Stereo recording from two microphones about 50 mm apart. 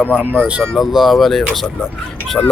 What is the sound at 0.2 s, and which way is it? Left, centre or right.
Speech, right.